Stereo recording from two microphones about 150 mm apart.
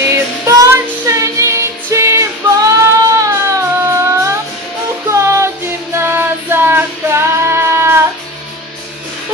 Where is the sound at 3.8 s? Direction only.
20° right (ahead or behind).